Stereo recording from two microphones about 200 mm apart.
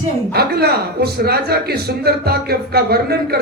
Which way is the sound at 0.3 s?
50° right (ahead or behind).